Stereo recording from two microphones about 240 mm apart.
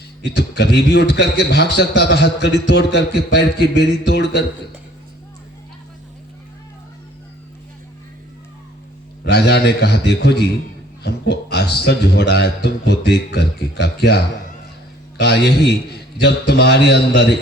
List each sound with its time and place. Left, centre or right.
0.3 s a man's voice: left
9.2 s a man's voice: left
15.2 s a man's voice: left